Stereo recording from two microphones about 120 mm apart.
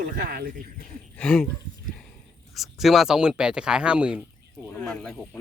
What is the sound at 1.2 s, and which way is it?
Speech, 5° left (ahead or behind).